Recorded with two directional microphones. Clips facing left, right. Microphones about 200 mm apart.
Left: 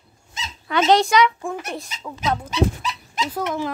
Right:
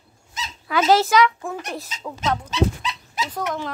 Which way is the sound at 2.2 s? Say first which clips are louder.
Left 1 dB; 10° left (ahead or behind).